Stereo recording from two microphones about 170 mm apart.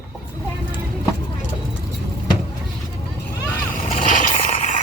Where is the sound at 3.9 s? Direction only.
50° left (ahead or behind).